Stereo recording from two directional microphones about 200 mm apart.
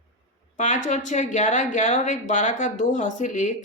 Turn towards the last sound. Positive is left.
turn(degrees=35)  # may be behind; listen again after turning